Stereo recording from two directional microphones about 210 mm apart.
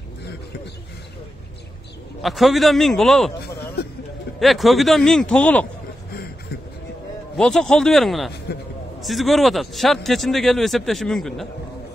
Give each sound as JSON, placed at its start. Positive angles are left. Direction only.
{"t": 2.2, "sound": "a man's voice", "side_deg": 0}
{"t": 4.4, "sound": "a man's voice", "side_deg": 0}
{"t": 7.3, "sound": "a man's voice", "side_deg": 5}
{"t": 8.5, "sound": "a man's voice", "side_deg": 50}
{"t": 9.0, "sound": "a man's voice", "side_deg": 0}